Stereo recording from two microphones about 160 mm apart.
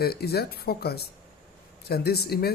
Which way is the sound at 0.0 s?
80° left.